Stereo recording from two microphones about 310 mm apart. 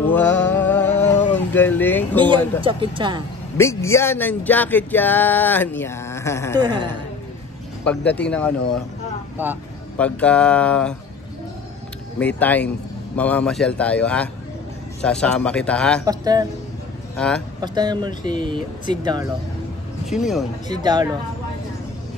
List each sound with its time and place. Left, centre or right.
0.0 s a sound: centre
2.6 s speech: centre
3.5 s speech: centre
6.6 s speech: centre
7.8 s a man's voice: centre
12.2 s a man's voice: centre
16.1 s speech: centre
17.6 s speech: centre
20.1 s a man's voice: centre
20.6 s speech: centre